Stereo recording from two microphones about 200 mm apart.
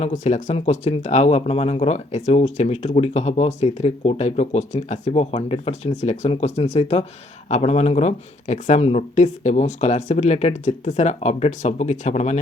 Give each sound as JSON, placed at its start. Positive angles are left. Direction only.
{"t": 0.0, "sound": "speech", "side_deg": 35}